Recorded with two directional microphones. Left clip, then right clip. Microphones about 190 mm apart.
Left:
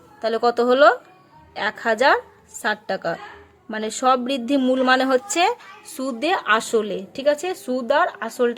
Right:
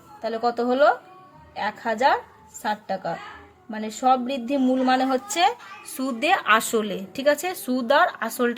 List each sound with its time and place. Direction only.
0.2 s a woman's voice: 35° left (ahead or behind); by 8.5 s 5° left (ahead or behind)